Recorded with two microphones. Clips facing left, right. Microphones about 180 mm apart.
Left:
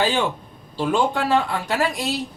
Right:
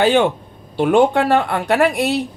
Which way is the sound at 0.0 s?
65° right (ahead or behind).